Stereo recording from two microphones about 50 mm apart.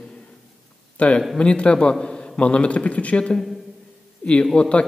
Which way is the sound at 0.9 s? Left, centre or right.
Left.